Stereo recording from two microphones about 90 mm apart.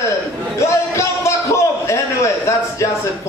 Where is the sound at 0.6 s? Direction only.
35° left (ahead or behind).